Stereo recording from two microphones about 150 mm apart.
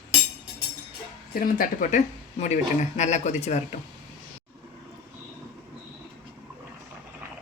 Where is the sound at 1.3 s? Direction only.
70° left (ahead or behind); by 3.8 s 50° left (ahead or behind).